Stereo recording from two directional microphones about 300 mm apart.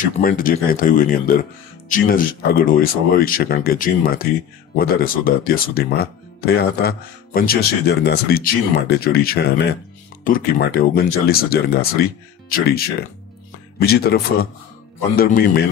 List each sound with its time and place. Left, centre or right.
0.2 s speech: left